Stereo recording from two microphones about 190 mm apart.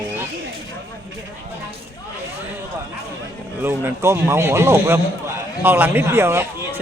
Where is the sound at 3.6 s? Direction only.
15° right (ahead or behind).